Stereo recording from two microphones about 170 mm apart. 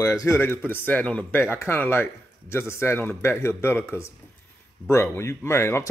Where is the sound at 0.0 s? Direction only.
20° left (ahead or behind).